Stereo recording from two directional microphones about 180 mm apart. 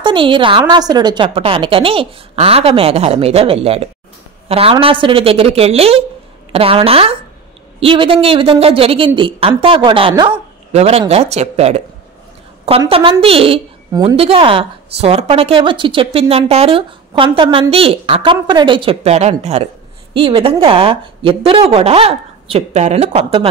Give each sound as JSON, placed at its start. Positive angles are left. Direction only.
{"t": 0.0, "sound": "a woman's voice", "side_deg": -30}